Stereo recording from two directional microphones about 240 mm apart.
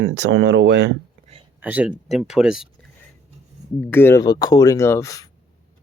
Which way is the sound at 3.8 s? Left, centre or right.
Centre.